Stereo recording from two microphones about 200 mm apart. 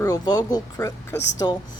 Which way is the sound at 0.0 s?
20° left (ahead or behind).